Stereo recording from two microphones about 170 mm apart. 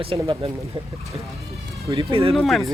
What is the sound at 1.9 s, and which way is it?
Speech, 30° right (ahead or behind).